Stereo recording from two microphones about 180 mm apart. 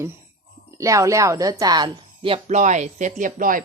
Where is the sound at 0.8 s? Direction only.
15° right (ahead or behind).